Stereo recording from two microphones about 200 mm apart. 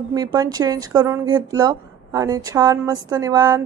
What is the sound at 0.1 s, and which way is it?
A woman's voice, 20° right (ahead or behind).